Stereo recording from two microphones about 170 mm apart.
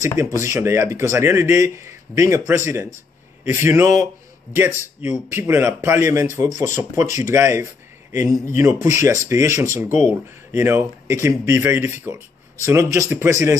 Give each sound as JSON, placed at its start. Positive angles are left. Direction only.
{"t": 0.4, "sound": "a man's voice", "side_deg": -15}